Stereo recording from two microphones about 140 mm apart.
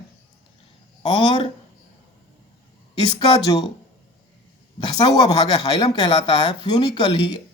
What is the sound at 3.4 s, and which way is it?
Speech, 30° left (ahead or behind).